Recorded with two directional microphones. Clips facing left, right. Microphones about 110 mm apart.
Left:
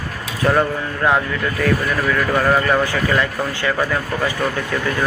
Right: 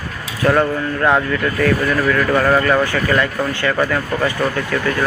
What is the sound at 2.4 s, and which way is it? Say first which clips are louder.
Speech: even; 10° left (ahead or behind).